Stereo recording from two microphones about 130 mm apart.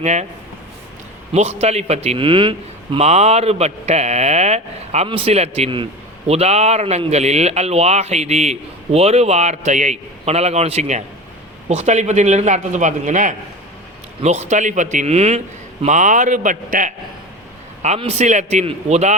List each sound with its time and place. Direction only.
0.0 s a man's voice: 60° right (ahead or behind)
1.3 s a man's voice: 55° right (ahead or behind)
5.0 s a man's voice: 45° right (ahead or behind); by 13.3 s 70° right (ahead or behind)
14.2 s a man's voice: 55° right (ahead or behind)
15.9 s a man's voice: 70° right (ahead or behind)
17.8 s a man's voice: 55° right (ahead or behind)